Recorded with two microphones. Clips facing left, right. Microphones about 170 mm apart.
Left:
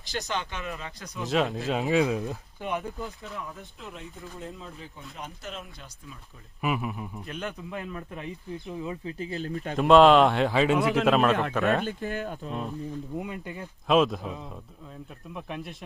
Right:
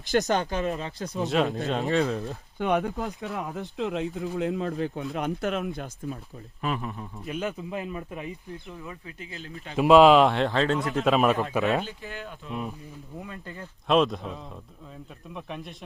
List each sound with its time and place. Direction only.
0.1 s speech: 45° right (ahead or behind); by 1.2 s 30° right (ahead or behind)
1.2 s speech: centre (ahead or behind)
2.6 s speech: 70° right (ahead or behind); by 6.1 s 55° right (ahead or behind)
6.6 s speech: 10° left (ahead or behind)
7.2 s speech: 5° right (ahead or behind)
8.8 s speech: 20° left (ahead or behind)
9.1 s speech: 35° left (ahead or behind)
9.7 s speech: centre (ahead or behind)
10.8 s a man's voice: 80° left
11.0 s speech: centre (ahead or behind)
11.5 s speech: 15° right (ahead or behind)
11.9 s speech: 45° left (ahead or behind)
13.1 s speech: 15° left (ahead or behind)